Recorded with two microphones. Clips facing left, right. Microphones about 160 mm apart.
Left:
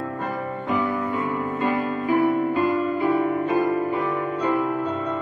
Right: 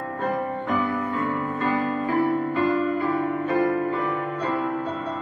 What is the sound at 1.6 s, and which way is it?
Music, 15° left (ahead or behind).